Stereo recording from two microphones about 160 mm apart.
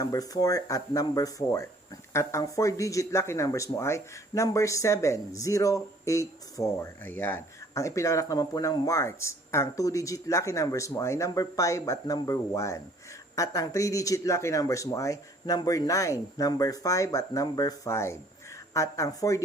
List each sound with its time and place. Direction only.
0.0 s speech: 20° left (ahead or behind)